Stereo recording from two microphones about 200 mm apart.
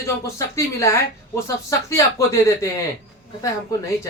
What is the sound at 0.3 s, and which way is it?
Speech, 15° left (ahead or behind).